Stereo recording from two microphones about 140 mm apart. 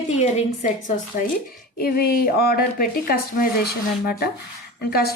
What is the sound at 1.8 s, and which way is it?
A woman's voice, 90° left.